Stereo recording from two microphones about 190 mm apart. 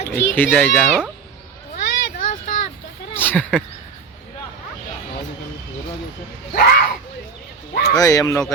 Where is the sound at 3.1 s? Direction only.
10° left (ahead or behind).